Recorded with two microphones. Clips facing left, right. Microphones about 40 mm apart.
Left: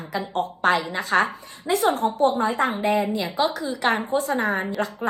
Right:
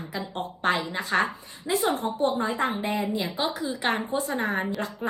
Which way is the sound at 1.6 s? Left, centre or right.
Left.